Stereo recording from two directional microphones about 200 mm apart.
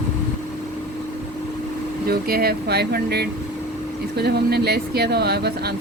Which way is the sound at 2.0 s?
50° right (ahead or behind).